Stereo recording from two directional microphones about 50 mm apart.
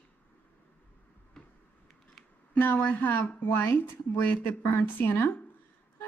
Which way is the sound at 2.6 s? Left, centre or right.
Left.